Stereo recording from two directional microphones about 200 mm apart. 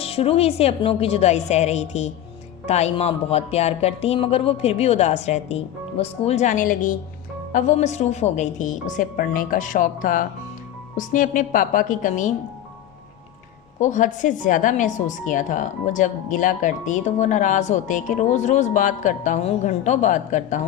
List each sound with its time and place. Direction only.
0.0 s a woman's voice: 30° left (ahead or behind)
13.7 s a woman's voice: 40° left (ahead or behind)